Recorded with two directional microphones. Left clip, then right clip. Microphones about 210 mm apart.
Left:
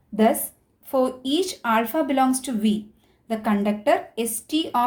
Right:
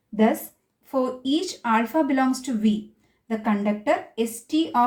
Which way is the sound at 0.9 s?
35° left (ahead or behind).